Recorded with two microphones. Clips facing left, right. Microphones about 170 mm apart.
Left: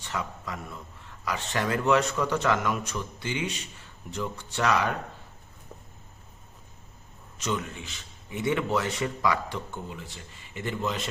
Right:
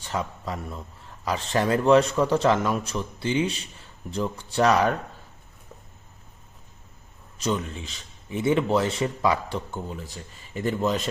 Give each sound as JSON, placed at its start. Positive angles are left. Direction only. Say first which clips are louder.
{"t": 0.0, "sound": "a man's voice", "louder": "right 4 dB", "side_deg": -30}
{"t": 7.3, "sound": "a man's voice", "louder": "right 4 dB", "side_deg": -30}